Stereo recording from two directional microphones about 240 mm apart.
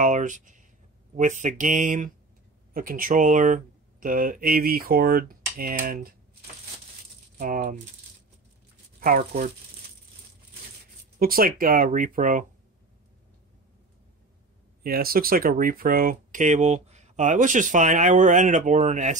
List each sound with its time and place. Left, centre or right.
0.0 s a sound: right
1.1 s speech: right
7.3 s speech: right
9.0 s speech: right
11.1 s speech: right
14.8 s speech: right